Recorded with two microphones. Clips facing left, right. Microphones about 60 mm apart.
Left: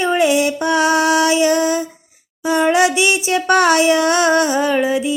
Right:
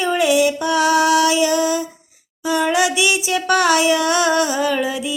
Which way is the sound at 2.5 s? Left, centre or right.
Left.